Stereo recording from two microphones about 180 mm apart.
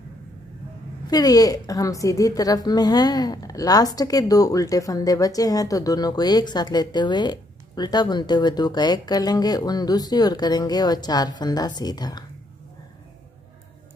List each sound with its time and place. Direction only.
1.1 s a woman's voice: 20° left (ahead or behind)